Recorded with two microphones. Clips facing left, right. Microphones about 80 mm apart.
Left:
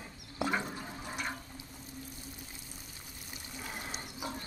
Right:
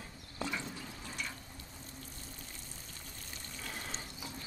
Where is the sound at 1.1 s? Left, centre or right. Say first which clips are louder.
Left 5 dB; left.